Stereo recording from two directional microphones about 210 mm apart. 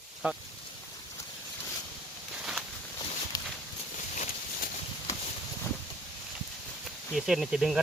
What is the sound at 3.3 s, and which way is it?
Clip-clop, 15° left (ahead or behind).